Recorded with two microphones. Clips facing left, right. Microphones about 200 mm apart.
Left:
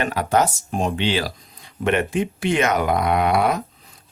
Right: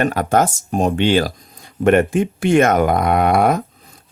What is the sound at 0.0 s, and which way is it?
Speech, 50° right (ahead or behind).